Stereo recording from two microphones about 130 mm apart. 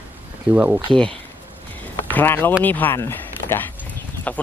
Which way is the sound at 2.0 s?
15° left (ahead or behind).